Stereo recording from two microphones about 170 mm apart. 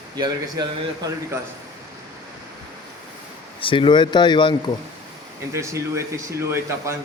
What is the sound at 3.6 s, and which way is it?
Speech, 30° left (ahead or behind).